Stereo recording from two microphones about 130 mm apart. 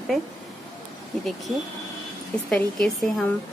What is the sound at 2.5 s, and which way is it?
Speech, 5° left (ahead or behind).